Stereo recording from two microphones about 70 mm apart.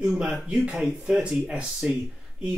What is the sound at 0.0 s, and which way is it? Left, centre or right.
Speech, centre.